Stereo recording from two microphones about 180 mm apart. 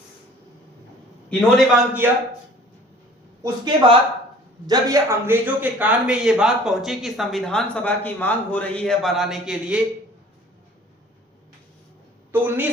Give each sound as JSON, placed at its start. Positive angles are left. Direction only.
{"t": 1.5, "sound": "a man's voice", "side_deg": -10}
{"t": 3.4, "sound": "a man's voice", "side_deg": -25}
{"t": 12.3, "sound": "a man's voice", "side_deg": -10}